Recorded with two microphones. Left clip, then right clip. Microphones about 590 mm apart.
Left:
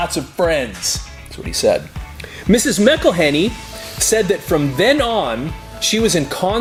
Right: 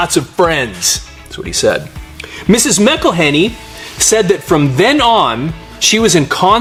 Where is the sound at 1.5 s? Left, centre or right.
Right.